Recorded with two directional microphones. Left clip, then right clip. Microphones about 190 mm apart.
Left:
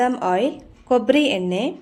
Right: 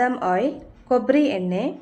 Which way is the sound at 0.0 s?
35° left (ahead or behind).